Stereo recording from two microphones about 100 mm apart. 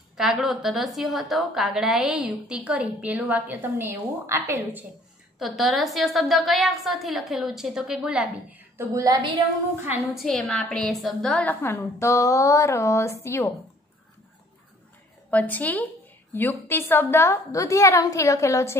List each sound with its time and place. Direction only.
0.2 s a woman's voice: 5° right (ahead or behind); by 4.8 s 30° right (ahead or behind)
5.4 s a woman's voice: centre (ahead or behind)
8.7 s a woman's voice: 35° right (ahead or behind)
10.0 s a woman's voice: centre (ahead or behind)
11.3 s a woman's voice: 20° left (ahead or behind)
15.3 s a woman's voice: 15° left (ahead or behind)